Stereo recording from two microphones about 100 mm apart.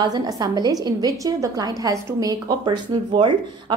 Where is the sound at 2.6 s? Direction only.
50° right (ahead or behind).